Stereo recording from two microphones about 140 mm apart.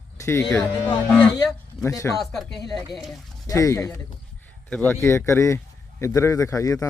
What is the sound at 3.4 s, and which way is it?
A man's voice, 25° left (ahead or behind).